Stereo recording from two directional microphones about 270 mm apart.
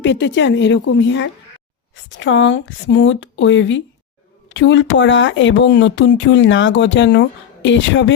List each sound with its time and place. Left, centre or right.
0.0 s speech: left